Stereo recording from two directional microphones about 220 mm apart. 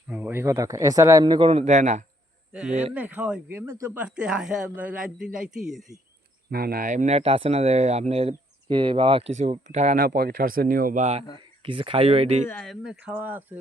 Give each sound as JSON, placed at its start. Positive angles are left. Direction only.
{"t": 0.1, "sound": "speech", "side_deg": -10}
{"t": 2.5, "sound": "speech", "side_deg": -5}
{"t": 6.5, "sound": "speech", "side_deg": -45}
{"t": 12.5, "sound": "speech", "side_deg": 0}